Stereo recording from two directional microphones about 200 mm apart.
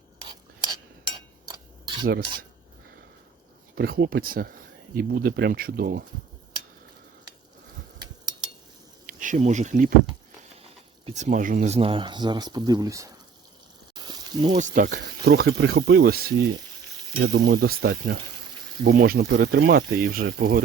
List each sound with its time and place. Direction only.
0.3 s whispering: 20° right (ahead or behind)
1.5 s a sound: 20° right (ahead or behind)
3.8 s speech: 50° right (ahead or behind)
9.1 s speech: 40° right (ahead or behind)
11.0 s speech: 35° right (ahead or behind); by 13.1 s 15° right (ahead or behind)
13.9 s a sound: 20° right (ahead or behind)
14.5 s speech: 40° right (ahead or behind)